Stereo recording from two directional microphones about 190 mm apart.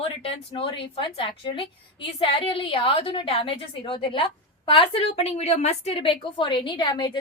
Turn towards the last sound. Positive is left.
turn(degrees=25)  # may be behind; listen again after turning